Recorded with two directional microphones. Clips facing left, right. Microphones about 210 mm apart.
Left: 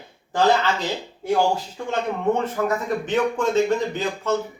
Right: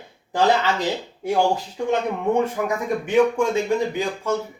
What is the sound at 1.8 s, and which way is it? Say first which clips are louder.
Speech: right 3 dB; 15° right (ahead or behind).